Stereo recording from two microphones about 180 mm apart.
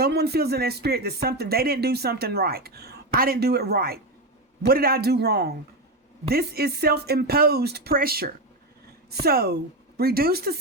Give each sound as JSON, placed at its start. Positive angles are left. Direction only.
{"t": 0.0, "sound": "speech", "side_deg": -65}